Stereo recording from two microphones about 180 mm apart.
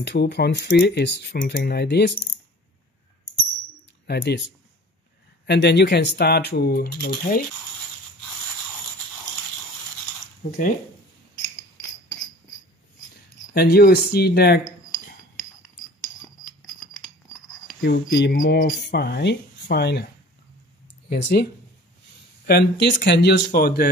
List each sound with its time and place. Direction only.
0.0 s speech: 70° left (ahead or behind)
4.1 s speech: 65° left (ahead or behind)
5.5 s speech: 65° left (ahead or behind)
10.4 s speech: 55° left (ahead or behind)
13.6 s speech: 60° left (ahead or behind)
17.8 s speech: 70° left (ahead or behind)
18.3 s a sound: 50° left (ahead or behind)
18.8 s speech: 70° left (ahead or behind)
21.1 s speech: 65° left (ahead or behind)
22.5 s speech: 65° left (ahead or behind)